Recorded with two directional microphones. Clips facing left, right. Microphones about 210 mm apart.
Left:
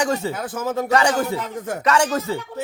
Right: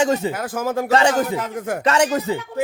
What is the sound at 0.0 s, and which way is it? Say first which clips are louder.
Speech: right 3 dB; 20° right (ahead or behind).